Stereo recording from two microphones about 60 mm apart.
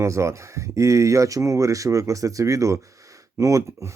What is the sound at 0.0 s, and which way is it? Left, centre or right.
Speech, right.